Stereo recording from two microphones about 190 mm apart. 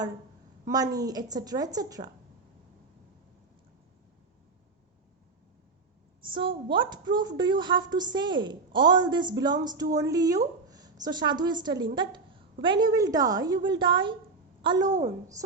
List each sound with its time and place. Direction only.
0.9 s a woman's voice: 20° right (ahead or behind)
6.3 s a woman's voice: 25° right (ahead or behind)
14.8 s a woman's voice: 40° right (ahead or behind)